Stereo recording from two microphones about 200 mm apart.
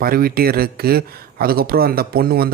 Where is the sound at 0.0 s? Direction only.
50° right (ahead or behind).